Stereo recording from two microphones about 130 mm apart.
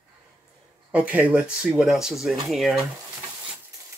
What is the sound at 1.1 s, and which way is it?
Speech, 10° right (ahead or behind).